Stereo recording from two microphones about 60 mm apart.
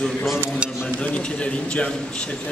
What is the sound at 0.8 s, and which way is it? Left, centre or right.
A man's voice, centre.